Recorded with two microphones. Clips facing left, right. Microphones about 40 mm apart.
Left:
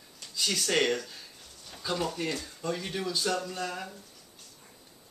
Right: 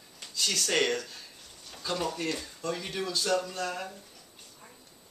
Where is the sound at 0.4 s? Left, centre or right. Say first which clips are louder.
Even; centre.